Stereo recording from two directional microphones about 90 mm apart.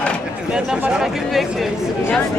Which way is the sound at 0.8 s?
10° right (ahead or behind).